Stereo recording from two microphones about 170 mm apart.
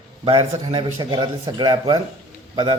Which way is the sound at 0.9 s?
30° right (ahead or behind).